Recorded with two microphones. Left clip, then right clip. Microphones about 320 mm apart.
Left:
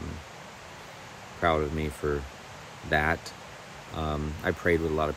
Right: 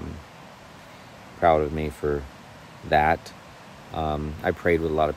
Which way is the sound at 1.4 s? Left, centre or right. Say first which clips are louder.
Right 6 dB; centre.